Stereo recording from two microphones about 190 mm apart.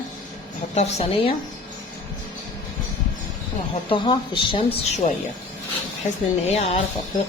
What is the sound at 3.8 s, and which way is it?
Speech, 25° left (ahead or behind).